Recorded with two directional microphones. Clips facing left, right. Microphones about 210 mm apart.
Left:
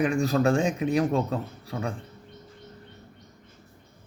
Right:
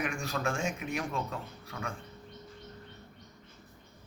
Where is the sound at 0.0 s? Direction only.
35° left (ahead or behind).